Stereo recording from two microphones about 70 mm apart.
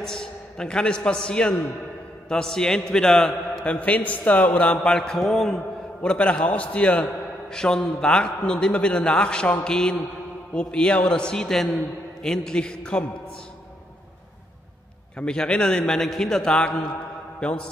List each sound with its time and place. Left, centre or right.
0.0 s a man's voice: centre
4.3 s a sound: left
4.9 s mantra: centre
6.0 s a man's voice: centre
15.1 s a man's voice: centre